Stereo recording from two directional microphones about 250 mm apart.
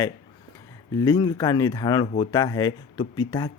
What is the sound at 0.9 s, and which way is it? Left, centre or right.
Speech, centre.